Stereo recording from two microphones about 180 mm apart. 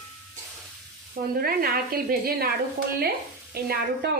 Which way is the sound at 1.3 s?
60° right (ahead or behind).